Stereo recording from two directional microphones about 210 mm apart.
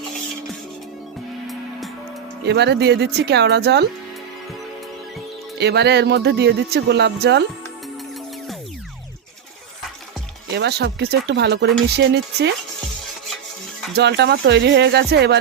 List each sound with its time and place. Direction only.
2.4 s speech: 55° right (ahead or behind)
5.5 s speech: 50° right (ahead or behind)
10.5 s speech: 50° right (ahead or behind)
13.9 s speech: 55° right (ahead or behind)